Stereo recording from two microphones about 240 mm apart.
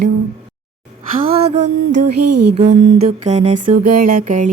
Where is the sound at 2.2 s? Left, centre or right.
Right.